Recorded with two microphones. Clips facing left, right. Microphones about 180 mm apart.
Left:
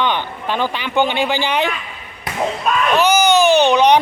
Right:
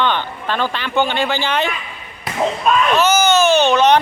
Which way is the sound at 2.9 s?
15° left (ahead or behind).